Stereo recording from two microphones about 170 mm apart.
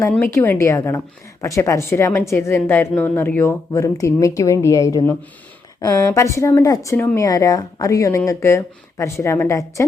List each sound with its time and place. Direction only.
0.1 s a woman's voice: 15° left (ahead or behind)